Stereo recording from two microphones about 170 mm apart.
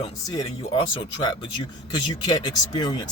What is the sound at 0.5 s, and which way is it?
Speech, 35° left (ahead or behind).